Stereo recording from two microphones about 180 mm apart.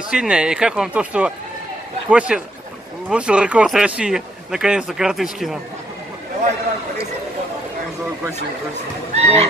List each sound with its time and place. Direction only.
0.1 s speech: 5° right (ahead or behind)
9.1 s fowl: 35° right (ahead or behind)